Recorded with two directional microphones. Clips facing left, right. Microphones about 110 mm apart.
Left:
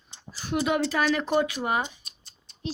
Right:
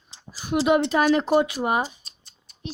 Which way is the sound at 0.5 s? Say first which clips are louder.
Right 5 dB; 20° right (ahead or behind).